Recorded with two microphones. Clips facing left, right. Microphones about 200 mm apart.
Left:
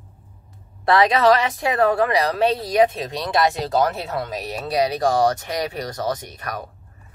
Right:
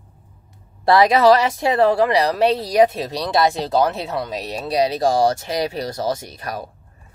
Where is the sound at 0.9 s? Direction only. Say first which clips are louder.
Right 3 dB; 30° right (ahead or behind).